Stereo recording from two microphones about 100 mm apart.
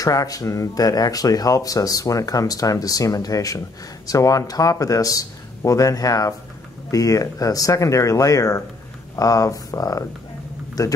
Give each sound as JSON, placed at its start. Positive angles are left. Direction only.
{"t": 0.0, "sound": "speech", "side_deg": 35}